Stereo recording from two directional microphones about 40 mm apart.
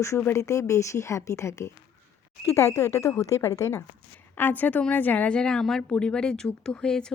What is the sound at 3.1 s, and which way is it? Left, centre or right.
Speech, left.